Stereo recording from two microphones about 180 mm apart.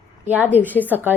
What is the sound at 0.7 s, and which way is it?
Speech, 10° left (ahead or behind).